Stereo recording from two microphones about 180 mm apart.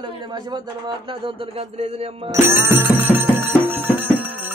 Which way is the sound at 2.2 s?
15° right (ahead or behind).